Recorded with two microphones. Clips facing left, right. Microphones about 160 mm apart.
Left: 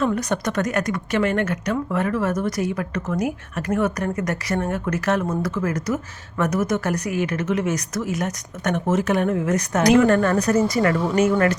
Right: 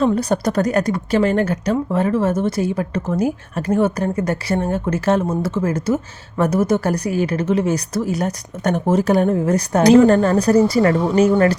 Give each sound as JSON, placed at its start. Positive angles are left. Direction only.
{"t": 0.0, "sound": "speech", "side_deg": -30}